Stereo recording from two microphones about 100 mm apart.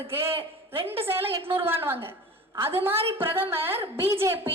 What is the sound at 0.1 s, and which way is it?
A woman's voice, 25° right (ahead or behind).